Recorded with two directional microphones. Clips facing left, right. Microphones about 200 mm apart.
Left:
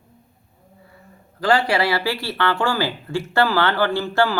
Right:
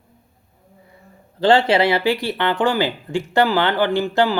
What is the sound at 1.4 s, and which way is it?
Speech, 25° right (ahead or behind).